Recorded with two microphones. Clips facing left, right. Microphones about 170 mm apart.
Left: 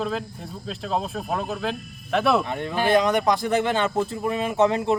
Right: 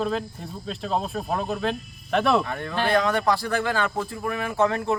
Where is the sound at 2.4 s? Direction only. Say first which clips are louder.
Left 2 dB; 20° left (ahead or behind).